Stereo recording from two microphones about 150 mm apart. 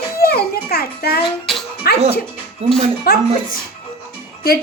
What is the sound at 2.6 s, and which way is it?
Speech, 45° right (ahead or behind).